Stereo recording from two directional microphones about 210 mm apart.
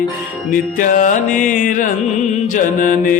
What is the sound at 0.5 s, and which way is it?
Music, 40° left (ahead or behind).